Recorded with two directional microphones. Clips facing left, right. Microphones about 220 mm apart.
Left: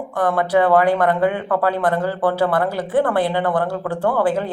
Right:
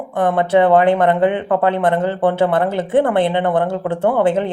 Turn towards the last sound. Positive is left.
turn(degrees=-25)  # may be behind; listen again after turning